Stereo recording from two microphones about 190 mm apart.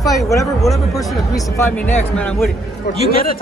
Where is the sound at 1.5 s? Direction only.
10° left (ahead or behind).